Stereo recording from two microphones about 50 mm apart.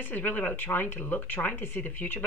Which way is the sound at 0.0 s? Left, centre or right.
Left.